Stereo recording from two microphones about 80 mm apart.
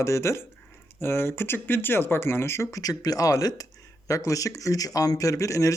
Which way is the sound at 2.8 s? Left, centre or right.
Left.